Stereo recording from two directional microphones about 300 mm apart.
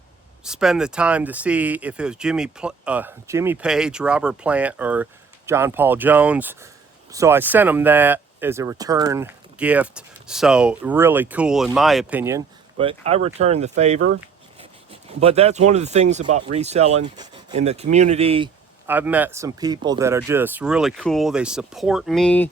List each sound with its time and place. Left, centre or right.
0.4 s speech: centre
18.9 s speech: centre